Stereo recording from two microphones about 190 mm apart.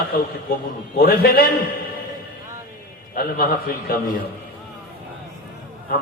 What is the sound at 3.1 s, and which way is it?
Speech, 50° left (ahead or behind).